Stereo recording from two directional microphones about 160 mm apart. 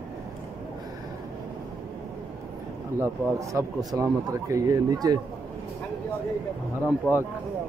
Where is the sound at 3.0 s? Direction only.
20° right (ahead or behind).